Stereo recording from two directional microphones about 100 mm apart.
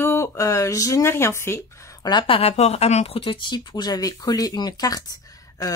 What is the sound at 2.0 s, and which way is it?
Speech, 55° left (ahead or behind).